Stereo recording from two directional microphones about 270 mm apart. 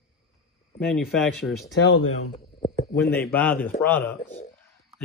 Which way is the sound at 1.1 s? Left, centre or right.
Centre.